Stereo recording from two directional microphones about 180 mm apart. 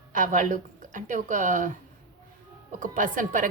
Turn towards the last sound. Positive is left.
turn(degrees=-45)  # may be behind; listen again after turning